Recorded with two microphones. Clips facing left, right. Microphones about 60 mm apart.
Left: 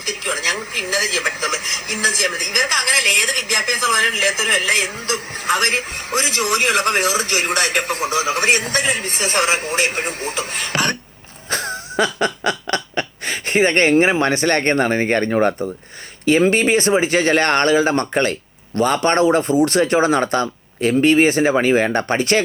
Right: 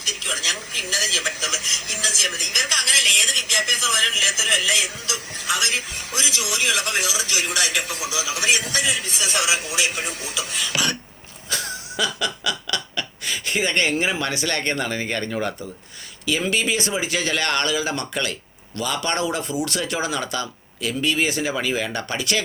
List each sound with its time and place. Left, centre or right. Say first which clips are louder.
0.0 s speech: left 5 dB; left
11.5 s snicker: left 7 dB; left
16.2 s speech: left 8 dB; left